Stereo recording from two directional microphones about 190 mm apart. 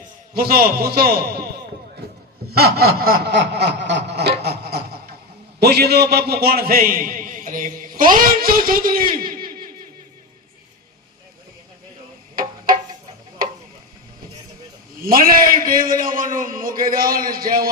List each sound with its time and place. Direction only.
0.3 s a man's voice: 50° right (ahead or behind)
2.5 s snicker: 55° right (ahead or behind)
5.5 s a man's voice: 55° right (ahead or behind)
15.0 s a man's voice: 50° right (ahead or behind)